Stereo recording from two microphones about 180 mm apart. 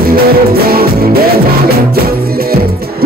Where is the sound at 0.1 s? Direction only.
55° right (ahead or behind).